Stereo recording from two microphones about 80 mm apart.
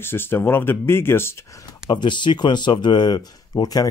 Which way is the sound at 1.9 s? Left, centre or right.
Left.